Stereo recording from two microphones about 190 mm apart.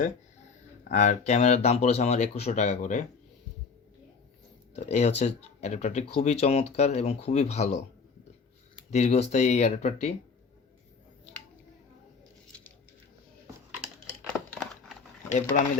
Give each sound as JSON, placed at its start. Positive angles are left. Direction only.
{"t": 0.9, "sound": "speech", "side_deg": 40}
{"t": 4.7, "sound": "speech", "side_deg": 35}
{"t": 8.9, "sound": "speech", "side_deg": 35}
{"t": 14.3, "sound": "crumpling", "side_deg": 5}
{"t": 15.3, "sound": "speech", "side_deg": 40}